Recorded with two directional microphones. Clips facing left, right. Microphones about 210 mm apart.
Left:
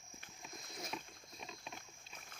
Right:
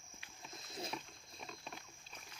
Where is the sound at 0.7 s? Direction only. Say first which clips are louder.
Right 4 dB; 30° right (ahead or behind).